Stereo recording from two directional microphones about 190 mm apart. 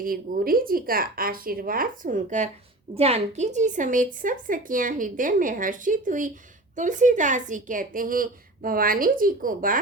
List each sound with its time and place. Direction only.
0.0 s a woman's voice: 50° right (ahead or behind)